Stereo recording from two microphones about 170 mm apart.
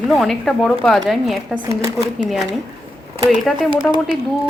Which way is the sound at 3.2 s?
Centre (ahead or behind).